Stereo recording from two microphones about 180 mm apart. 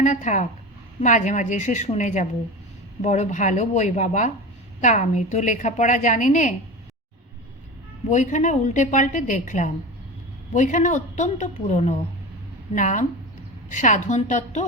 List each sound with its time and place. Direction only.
0.0 s a woman's voice: 40° left (ahead or behind)
8.1 s a woman's voice: 40° left (ahead or behind)